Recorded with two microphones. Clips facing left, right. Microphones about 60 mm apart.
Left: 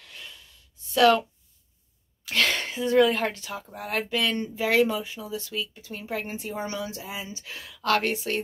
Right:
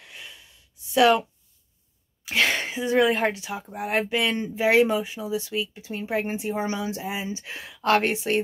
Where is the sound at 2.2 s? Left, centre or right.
Centre.